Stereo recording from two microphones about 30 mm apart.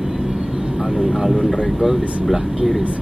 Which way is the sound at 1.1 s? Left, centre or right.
Centre.